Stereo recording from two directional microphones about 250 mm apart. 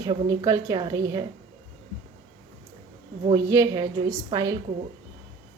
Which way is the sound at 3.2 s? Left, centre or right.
Centre.